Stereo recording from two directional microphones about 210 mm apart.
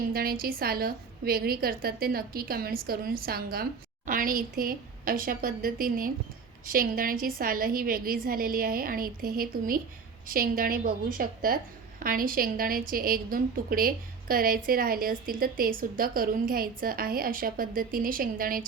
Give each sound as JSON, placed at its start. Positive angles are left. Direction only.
{"t": 0.1, "sound": "a woman's voice", "side_deg": -45}